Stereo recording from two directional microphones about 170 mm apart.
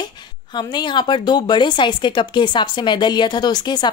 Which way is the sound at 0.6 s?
25° left (ahead or behind).